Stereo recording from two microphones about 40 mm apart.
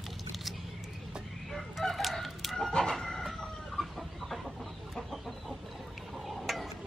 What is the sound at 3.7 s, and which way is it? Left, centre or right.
Chicken, centre.